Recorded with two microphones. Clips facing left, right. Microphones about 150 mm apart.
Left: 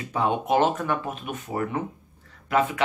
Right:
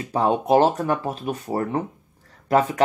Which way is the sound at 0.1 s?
35° right (ahead or behind).